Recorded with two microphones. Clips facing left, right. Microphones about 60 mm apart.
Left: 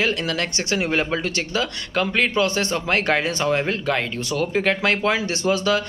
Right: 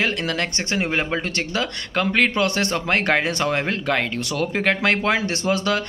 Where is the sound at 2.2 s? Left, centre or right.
Right.